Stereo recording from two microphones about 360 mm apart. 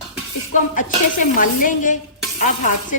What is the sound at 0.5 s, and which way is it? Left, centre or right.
Speech, left.